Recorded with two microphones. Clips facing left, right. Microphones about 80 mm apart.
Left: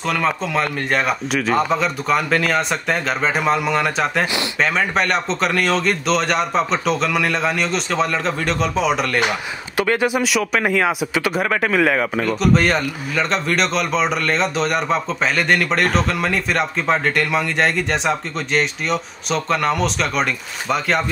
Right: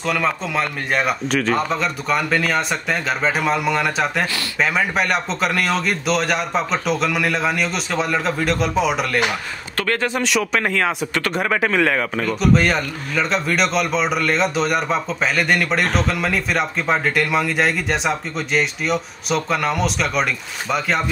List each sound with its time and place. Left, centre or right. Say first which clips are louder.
0.0 s speech: left 1 dB; centre
9.8 s speech: left 3 dB; centre